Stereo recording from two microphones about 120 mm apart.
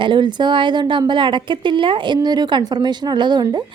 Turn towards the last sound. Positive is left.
turn(degrees=-35)  # may be behind; listen again after turning